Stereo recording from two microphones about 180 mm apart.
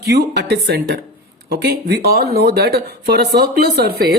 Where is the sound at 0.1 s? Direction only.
65° right (ahead or behind).